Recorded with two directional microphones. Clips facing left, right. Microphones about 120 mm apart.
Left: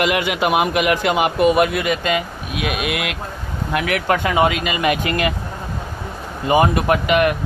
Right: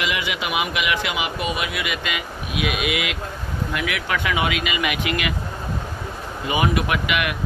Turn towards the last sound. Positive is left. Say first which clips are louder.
# left 7 dB
turn(degrees=40)  # may be behind; listen again after turning